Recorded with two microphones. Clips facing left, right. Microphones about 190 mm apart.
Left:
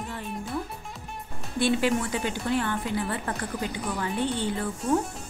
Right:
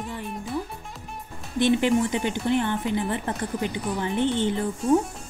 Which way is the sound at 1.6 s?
20° right (ahead or behind).